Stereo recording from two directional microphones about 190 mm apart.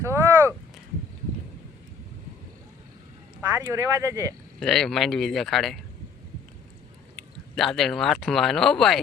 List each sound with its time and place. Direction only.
0.0 s a sound: 15° right (ahead or behind)
3.6 s speech: 15° right (ahead or behind)
4.6 s speech: centre (ahead or behind)
7.5 s speech: centre (ahead or behind)